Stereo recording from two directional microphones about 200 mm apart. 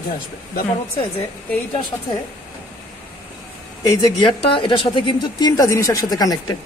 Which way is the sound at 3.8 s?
20° left (ahead or behind).